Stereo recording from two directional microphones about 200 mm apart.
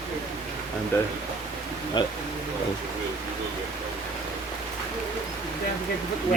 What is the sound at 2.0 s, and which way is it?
Speech, 20° left (ahead or behind).